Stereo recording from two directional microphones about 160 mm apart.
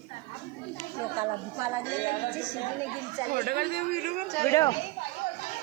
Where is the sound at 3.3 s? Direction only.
70° right (ahead or behind).